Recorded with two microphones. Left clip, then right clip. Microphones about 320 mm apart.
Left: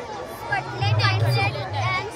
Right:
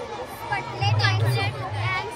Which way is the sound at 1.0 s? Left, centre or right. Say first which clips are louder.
Left 5 dB; left.